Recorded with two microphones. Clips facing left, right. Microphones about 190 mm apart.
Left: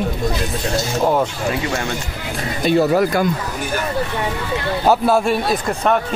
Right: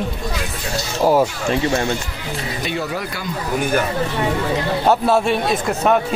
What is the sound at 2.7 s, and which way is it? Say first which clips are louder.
Speech: left 12 dB; 45° left (ahead or behind).